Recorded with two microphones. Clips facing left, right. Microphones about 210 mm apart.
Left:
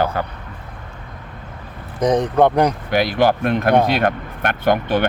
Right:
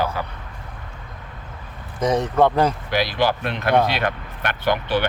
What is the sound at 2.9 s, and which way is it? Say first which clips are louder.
Speech: left 5 dB; 55° left (ahead or behind).